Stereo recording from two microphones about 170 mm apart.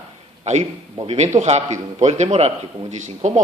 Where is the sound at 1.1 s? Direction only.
45° right (ahead or behind).